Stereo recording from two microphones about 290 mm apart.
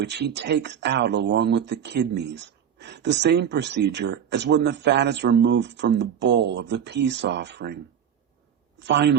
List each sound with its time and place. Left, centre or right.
0.0 s speech: right
8.8 s speech: right